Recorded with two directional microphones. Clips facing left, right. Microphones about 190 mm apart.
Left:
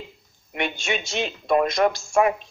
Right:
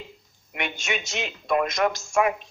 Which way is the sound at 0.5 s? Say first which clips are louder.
Left 4 dB; 35° left (ahead or behind).